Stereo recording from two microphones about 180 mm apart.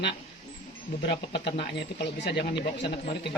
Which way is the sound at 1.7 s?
70° left (ahead or behind).